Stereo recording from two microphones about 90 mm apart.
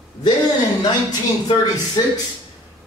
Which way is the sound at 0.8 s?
45° left (ahead or behind).